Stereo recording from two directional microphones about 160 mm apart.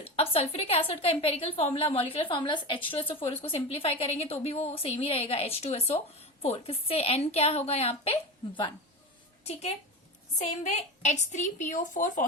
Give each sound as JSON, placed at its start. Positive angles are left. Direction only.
{"t": 0.0, "sound": "a woman's voice", "side_deg": 40}
{"t": 9.4, "sound": "a woman's voice", "side_deg": 40}